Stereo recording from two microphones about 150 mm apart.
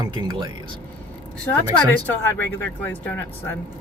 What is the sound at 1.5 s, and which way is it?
Speech, 10° left (ahead or behind).